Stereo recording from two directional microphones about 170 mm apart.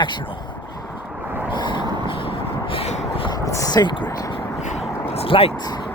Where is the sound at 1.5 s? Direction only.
25° left (ahead or behind).